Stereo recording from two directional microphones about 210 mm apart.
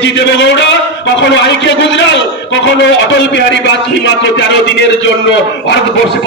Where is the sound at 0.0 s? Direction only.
55° left (ahead or behind).